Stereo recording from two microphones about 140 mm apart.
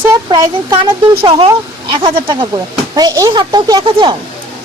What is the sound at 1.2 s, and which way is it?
Speech, 40° right (ahead or behind).